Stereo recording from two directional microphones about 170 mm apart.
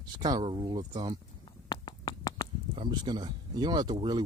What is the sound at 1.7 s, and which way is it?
Finger snapping, 25° left (ahead or behind).